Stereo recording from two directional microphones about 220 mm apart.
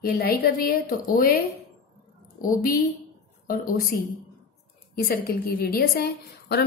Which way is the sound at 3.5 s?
40° left (ahead or behind).